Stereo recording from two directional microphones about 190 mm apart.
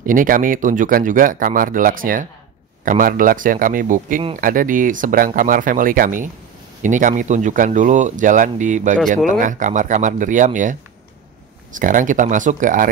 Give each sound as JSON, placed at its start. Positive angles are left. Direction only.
{"t": 0.0, "sound": "speech", "side_deg": -45}